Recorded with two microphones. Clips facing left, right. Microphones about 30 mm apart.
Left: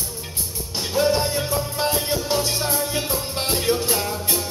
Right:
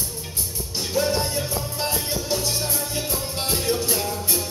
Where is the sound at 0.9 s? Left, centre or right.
Centre.